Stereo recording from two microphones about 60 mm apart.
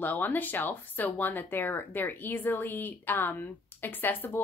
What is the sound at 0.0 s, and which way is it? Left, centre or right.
Speech, left.